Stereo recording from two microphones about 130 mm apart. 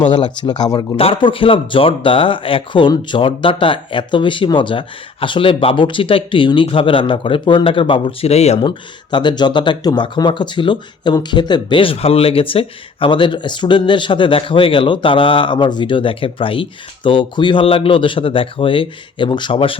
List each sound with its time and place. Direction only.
0.1 s speech: 35° left (ahead or behind)
0.9 s speech: 45° left (ahead or behind)
8.6 s speech: 35° left (ahead or behind)